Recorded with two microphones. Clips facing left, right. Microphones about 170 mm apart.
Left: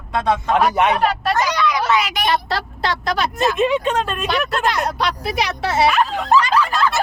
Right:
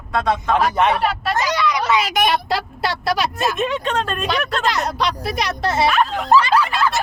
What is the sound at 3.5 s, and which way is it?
Speech, 10° left (ahead or behind).